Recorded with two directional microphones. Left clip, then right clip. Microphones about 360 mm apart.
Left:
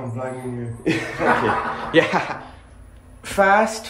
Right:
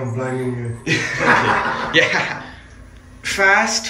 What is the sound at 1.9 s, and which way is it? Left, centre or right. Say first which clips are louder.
Speech: right 1 dB; centre.